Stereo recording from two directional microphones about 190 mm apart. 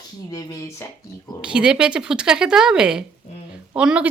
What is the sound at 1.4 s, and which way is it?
A woman's voice, 5° right (ahead or behind).